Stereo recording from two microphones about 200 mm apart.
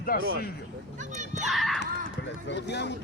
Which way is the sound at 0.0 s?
45° left (ahead or behind).